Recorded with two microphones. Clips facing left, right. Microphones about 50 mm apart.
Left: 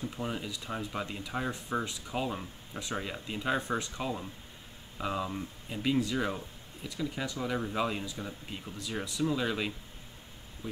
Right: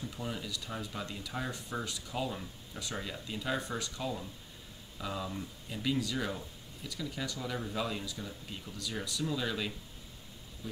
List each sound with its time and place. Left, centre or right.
0.1 s speech: left